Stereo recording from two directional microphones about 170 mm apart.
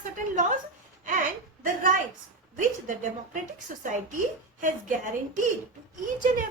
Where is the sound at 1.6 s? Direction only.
50° right (ahead or behind).